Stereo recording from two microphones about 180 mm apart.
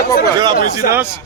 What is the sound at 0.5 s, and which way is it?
Speech, 60° left (ahead or behind).